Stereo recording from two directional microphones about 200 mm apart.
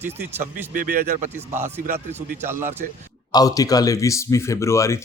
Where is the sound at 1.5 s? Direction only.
10° right (ahead or behind).